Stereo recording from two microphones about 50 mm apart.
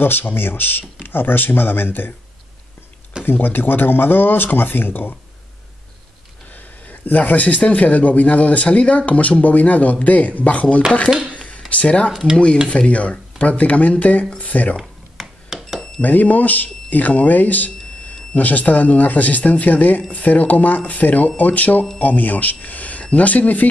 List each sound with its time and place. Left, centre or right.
0.0 s speech: left
3.3 s speech: left
6.5 s speech: left
11.3 s a sound: left
11.7 s speech: left
14.8 s a sound: centre
16.0 s speech: left